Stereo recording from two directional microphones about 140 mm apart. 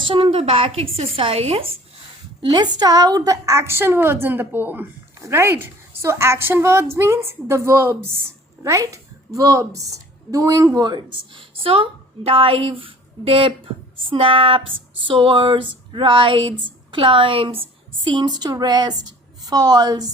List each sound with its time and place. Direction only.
0.0 s a woman's voice: 40° right (ahead or behind)
2.4 s a woman's voice: 30° right (ahead or behind)